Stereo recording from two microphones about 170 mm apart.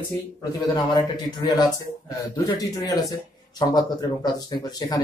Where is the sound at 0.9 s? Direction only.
25° left (ahead or behind).